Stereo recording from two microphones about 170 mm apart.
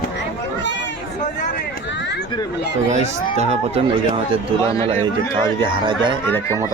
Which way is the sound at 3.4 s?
40° right (ahead or behind).